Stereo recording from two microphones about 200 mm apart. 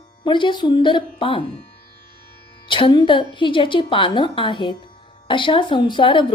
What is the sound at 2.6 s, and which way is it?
Speech, 25° left (ahead or behind).